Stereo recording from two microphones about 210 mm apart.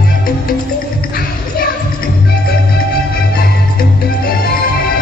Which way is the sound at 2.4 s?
45° left (ahead or behind).